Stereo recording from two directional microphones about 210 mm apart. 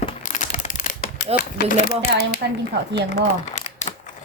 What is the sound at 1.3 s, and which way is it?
Speech, 40° left (ahead or behind).